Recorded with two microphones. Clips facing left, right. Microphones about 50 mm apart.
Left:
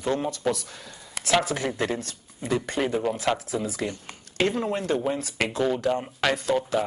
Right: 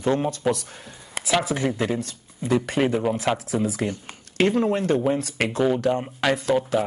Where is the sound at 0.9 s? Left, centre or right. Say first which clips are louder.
Right 3 dB; right.